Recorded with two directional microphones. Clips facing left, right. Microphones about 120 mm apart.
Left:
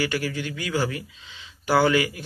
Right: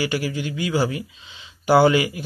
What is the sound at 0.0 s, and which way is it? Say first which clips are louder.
Speech: right 2 dB; 20° right (ahead or behind).